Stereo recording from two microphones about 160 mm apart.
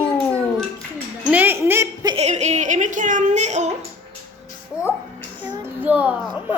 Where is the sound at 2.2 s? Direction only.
45° right (ahead or behind).